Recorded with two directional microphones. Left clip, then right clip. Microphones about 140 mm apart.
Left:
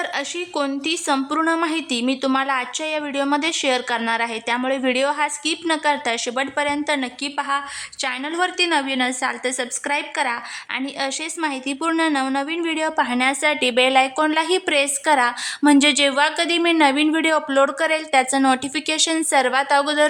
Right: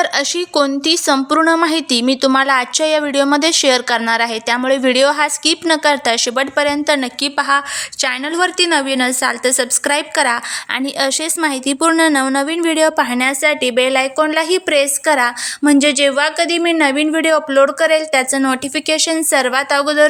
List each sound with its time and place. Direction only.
0.0 s a woman's voice: 25° right (ahead or behind)